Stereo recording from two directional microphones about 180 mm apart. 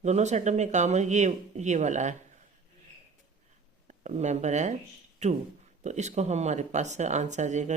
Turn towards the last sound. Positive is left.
turn(degrees=-40)  # may be behind; listen again after turning